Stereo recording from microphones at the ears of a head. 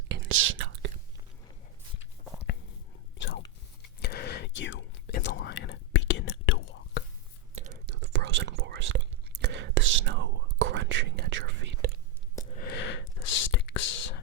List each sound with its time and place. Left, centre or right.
0.1 s whispering: right
2.0 s a sound: left
3.8 s whispering: left
7.5 s whispering: right
12.5 s whispering: left